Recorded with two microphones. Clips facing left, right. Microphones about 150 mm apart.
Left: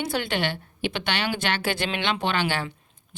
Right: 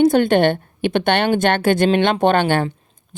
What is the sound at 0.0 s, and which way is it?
A woman's voice, 50° right (ahead or behind).